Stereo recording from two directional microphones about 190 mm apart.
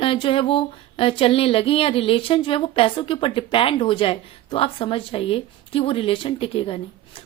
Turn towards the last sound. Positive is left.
turn(degrees=30)  # may be behind; listen again after turning